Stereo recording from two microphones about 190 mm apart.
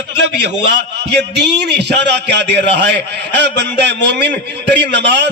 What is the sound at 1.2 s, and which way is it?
A man's voice, 65° right (ahead or behind).